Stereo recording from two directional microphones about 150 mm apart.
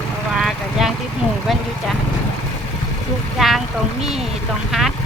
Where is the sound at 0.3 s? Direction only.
Centre (ahead or behind).